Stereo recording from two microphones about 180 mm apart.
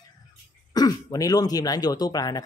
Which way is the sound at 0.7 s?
20° left (ahead or behind).